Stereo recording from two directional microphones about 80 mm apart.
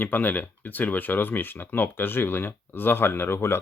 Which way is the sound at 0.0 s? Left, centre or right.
Left.